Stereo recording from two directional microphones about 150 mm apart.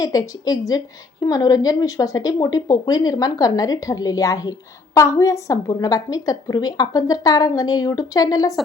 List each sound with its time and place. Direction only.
0.0 s a woman's voice: 25° left (ahead or behind)